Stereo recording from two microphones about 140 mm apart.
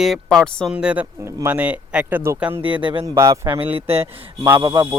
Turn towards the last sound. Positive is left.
turn(degrees=-30)  # may be behind; listen again after turning